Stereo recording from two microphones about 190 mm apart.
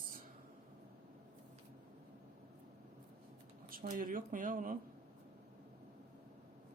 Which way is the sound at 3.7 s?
45° right (ahead or behind).